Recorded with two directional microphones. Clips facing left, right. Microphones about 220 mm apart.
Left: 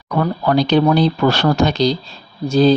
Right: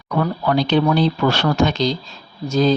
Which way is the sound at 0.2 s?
40° left (ahead or behind).